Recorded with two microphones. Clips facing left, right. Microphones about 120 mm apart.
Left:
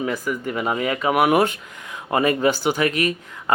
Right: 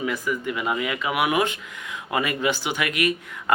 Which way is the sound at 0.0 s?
40° left (ahead or behind).